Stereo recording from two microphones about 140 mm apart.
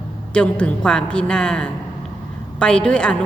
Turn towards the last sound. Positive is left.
turn(degrees=5)  # may be behind; listen again after turning